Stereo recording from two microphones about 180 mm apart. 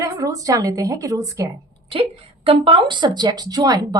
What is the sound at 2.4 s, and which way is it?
Speech, 30° right (ahead or behind).